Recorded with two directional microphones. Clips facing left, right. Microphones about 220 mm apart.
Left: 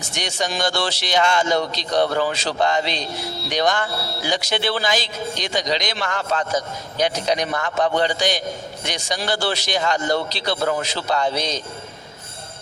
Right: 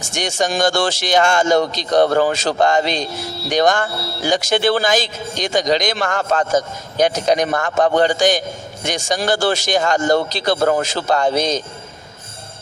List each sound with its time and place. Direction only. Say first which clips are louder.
0.0 s speech: right 5 dB; 45° right (ahead or behind)